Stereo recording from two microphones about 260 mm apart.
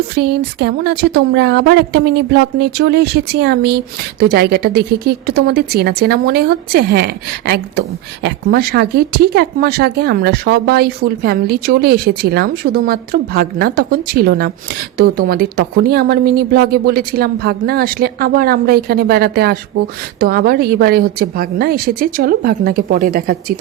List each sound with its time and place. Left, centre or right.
0.2 s a woman's voice: right